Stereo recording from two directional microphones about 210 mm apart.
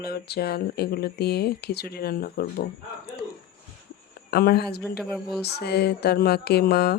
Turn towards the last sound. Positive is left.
turn(degrees=50)  # may be behind; listen again after turning